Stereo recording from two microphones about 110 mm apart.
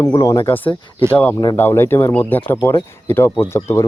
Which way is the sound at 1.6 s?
20° left (ahead or behind).